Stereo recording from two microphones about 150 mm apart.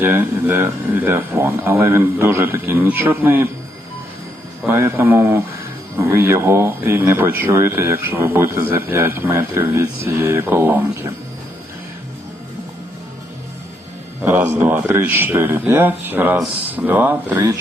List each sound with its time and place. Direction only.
0.0 s speech: 15° right (ahead or behind)
4.6 s speech: 15° right (ahead or behind)
14.2 s speech: 15° right (ahead or behind)